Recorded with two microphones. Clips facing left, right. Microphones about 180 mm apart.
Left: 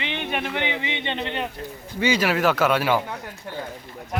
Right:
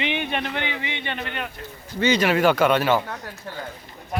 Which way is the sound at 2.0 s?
10° left (ahead or behind).